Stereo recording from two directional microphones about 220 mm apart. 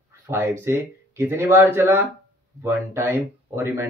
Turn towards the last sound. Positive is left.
turn(degrees=-10)  # may be behind; listen again after turning